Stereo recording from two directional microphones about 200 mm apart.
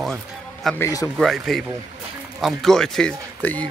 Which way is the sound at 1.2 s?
Centre (ahead or behind).